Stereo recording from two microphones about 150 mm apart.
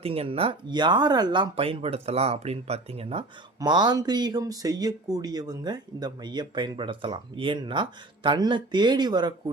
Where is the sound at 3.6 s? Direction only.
30° right (ahead or behind).